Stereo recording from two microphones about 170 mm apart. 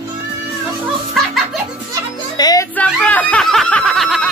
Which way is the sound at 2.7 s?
10° left (ahead or behind).